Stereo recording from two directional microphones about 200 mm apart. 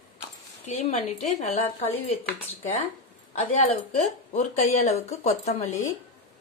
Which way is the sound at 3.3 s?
30° left (ahead or behind).